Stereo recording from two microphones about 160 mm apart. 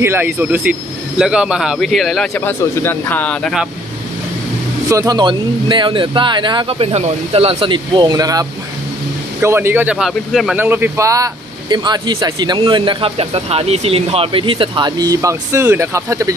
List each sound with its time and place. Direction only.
0.0 s speech: 15° right (ahead or behind)
2.3 s speech: 15° left (ahead or behind)
4.8 s speech: 20° right (ahead or behind); by 10.6 s centre (ahead or behind)
10.6 s speech: 15° right (ahead or behind)